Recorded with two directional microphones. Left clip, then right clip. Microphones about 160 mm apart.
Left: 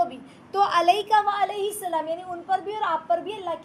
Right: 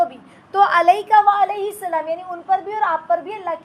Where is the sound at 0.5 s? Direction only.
15° right (ahead or behind).